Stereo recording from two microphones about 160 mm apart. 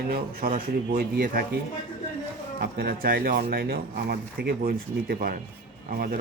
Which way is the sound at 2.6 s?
70° right (ahead or behind).